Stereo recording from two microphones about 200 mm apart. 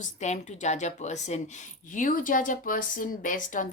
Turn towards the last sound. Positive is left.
turn(degrees=40)  # may be behind; listen again after turning